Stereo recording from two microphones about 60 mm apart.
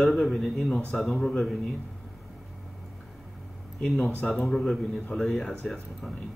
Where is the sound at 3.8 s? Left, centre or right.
Centre.